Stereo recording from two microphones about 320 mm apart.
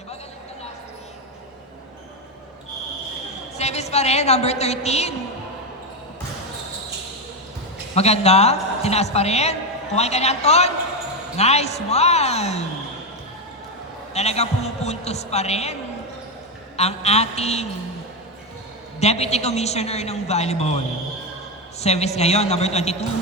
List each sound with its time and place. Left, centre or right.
3.6 s a woman's voice: centre
7.9 s a man's voice: centre
14.1 s a man's voice: centre
18.9 s a man's voice: centre